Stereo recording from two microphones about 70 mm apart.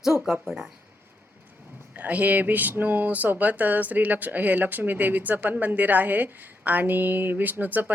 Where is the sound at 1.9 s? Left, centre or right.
Right.